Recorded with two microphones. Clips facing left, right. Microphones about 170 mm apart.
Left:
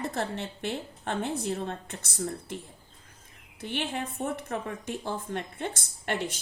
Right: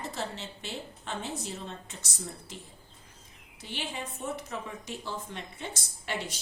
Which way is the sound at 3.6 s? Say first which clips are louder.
Left 6 dB; 55° left (ahead or behind).